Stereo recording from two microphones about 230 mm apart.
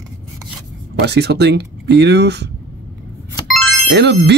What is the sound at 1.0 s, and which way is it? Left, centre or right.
Speech, right.